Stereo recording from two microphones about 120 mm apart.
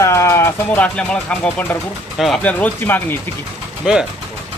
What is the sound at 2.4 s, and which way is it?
Speech, 15° left (ahead or behind).